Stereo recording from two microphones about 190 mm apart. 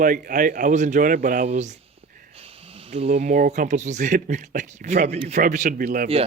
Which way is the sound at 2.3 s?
30° right (ahead or behind).